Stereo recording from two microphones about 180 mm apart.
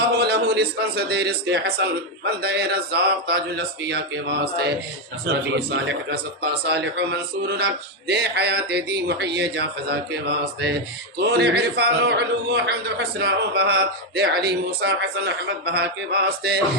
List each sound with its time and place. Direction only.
0.2 s a man's voice: 65° right (ahead or behind)
5.2 s a man's voice: 70° right (ahead or behind)